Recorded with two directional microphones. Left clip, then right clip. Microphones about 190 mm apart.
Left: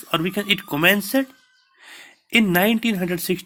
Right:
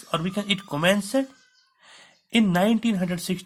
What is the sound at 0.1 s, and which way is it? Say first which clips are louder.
A woman's voice: left 5 dB; 20° left (ahead or behind).